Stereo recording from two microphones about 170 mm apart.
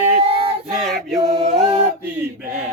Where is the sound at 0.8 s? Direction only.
Centre (ahead or behind).